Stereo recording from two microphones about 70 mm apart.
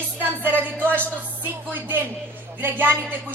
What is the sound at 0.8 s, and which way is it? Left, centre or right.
Speech, right.